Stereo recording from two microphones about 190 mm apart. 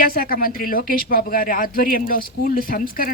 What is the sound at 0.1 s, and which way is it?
Speech, 50° left (ahead or behind).